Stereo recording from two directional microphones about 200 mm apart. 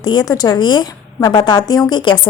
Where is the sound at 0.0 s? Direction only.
20° left (ahead or behind).